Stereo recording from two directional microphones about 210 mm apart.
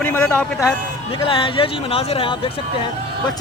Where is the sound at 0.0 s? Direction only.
10° left (ahead or behind).